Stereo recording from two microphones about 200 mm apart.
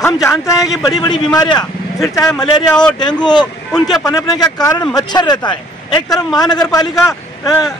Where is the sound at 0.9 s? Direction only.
20° left (ahead or behind).